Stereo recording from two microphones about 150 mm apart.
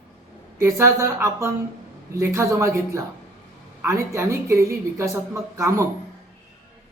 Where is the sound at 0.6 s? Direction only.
20° right (ahead or behind).